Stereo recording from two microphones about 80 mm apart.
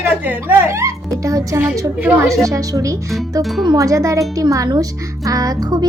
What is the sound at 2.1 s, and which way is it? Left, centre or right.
Speech, right.